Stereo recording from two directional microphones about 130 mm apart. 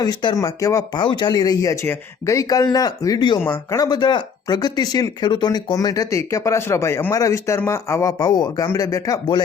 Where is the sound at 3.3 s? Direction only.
20° left (ahead or behind).